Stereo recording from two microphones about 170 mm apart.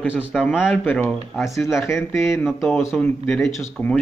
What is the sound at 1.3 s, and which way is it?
Speech, centre (ahead or behind).